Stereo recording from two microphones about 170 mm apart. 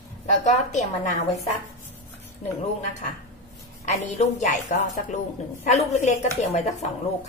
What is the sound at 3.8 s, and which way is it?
A woman's voice, 45° left (ahead or behind).